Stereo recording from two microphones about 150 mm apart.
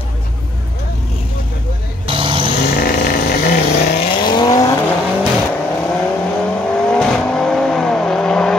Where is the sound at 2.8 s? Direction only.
80° left.